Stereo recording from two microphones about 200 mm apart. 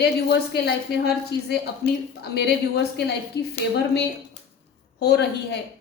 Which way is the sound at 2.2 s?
55° left (ahead or behind).